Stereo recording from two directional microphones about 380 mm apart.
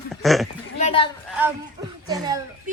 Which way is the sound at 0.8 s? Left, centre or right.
Centre.